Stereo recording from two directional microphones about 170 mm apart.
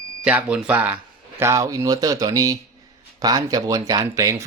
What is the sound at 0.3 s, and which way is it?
Speech, 10° right (ahead or behind).